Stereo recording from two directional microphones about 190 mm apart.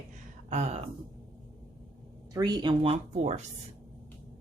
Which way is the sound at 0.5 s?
35° right (ahead or behind).